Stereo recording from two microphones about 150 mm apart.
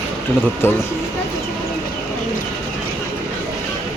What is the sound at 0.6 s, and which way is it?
Speech, 15° left (ahead or behind).